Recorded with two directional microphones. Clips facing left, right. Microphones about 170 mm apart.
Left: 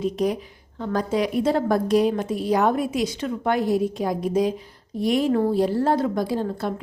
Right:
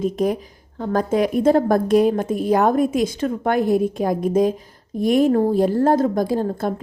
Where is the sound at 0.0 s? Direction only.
50° right (ahead or behind).